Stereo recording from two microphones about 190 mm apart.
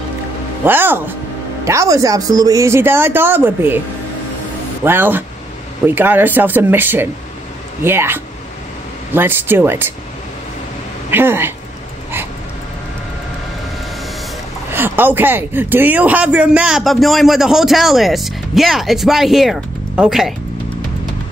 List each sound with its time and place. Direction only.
0.7 s speech: 10° right (ahead or behind)
4.8 s speech: 10° right (ahead or behind)
11.1 s speech: 10° right (ahead or behind)
14.7 s speech: 10° right (ahead or behind)